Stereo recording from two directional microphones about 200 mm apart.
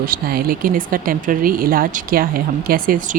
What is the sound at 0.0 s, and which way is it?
A woman's voice, 45° right (ahead or behind).